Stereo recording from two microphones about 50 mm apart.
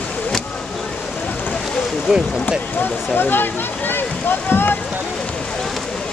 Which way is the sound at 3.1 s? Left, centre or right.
Left.